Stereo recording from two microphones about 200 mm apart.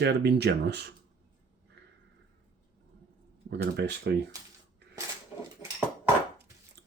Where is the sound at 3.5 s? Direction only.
55° right (ahead or behind).